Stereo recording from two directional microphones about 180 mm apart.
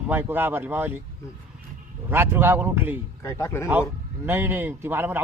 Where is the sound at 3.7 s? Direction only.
10° right (ahead or behind).